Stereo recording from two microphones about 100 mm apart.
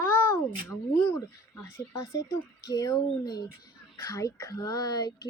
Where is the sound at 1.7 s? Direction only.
35° left (ahead or behind).